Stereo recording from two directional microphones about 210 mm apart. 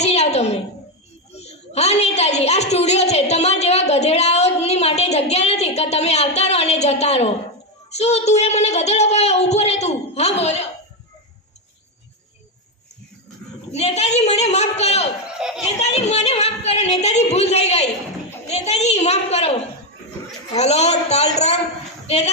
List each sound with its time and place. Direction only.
0.0 s a sound: 30° left (ahead or behind)
1.3 s a woman's voice: 30° left (ahead or behind)
13.7 s speech: 30° left (ahead or behind)
15.4 s a child's voice: 5° right (ahead or behind)
15.6 s speech: 30° left (ahead or behind)
20.6 s speech: 30° left (ahead or behind)